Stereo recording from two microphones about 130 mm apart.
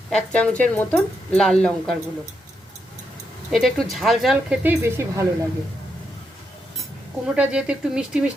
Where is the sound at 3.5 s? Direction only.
Centre (ahead or behind).